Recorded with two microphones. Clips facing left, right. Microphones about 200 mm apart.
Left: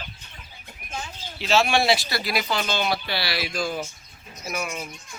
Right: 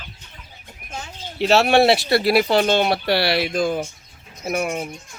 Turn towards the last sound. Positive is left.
turn(degrees=-55)  # may be behind; listen again after turning